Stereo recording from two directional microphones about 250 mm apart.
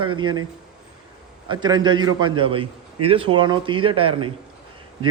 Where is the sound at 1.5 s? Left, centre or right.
Centre.